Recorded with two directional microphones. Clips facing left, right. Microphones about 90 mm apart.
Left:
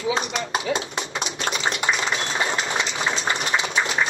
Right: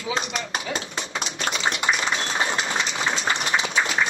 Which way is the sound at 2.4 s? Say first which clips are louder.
Left 1 dB; 30° left (ahead or behind).